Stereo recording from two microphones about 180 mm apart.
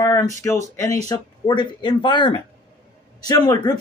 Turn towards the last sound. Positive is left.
turn(degrees=20)  # may be behind; listen again after turning